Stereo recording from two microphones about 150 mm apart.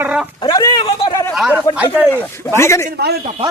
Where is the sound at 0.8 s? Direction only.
35° left (ahead or behind).